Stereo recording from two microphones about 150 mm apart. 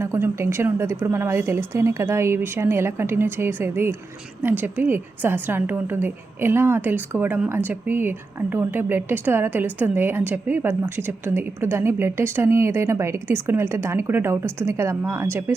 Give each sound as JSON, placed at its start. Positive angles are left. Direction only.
{"t": 0.0, "sound": "a woman's voice", "side_deg": -20}